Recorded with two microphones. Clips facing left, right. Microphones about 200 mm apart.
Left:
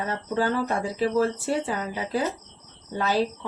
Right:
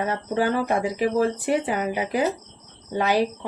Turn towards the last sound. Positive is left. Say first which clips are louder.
# right 3 dB
turn(degrees=-15)  # may be behind; listen again after turning